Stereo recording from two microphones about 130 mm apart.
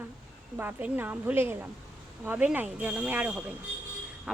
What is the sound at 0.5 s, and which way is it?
Speech, 15° right (ahead or behind).